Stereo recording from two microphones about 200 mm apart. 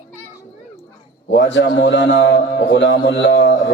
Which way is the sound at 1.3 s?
60° left (ahead or behind).